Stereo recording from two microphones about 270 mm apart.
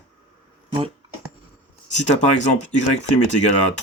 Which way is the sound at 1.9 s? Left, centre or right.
Left.